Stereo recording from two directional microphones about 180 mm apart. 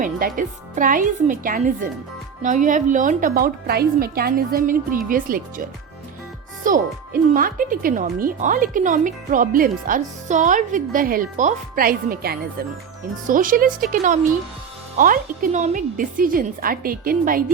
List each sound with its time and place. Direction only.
0.3 s speech: 50° right (ahead or behind)
6.7 s speech: 50° right (ahead or behind)